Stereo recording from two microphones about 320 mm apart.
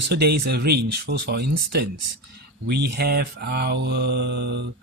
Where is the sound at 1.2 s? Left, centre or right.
Right.